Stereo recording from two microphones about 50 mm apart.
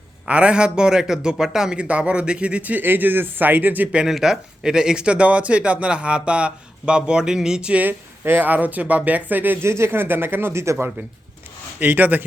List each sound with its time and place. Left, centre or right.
0.3 s speech: right
2.8 s speech: right
4.1 s speech: centre
7.7 s speech: right
8.2 s speech: right
8.4 s speech: right
9.6 s speech: right
10.5 s speech: right
11.8 s speech: right